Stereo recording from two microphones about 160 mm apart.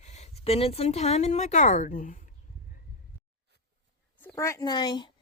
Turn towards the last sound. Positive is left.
turn(degrees=25)  # may be behind; listen again after turning